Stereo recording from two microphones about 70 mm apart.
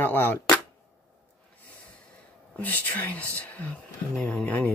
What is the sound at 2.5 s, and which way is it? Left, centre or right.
Speech, left.